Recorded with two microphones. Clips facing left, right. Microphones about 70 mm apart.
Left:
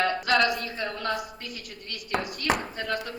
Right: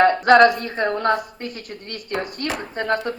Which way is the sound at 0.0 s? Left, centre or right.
Right.